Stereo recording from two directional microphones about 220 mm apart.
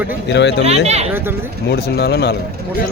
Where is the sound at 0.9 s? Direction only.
30° right (ahead or behind).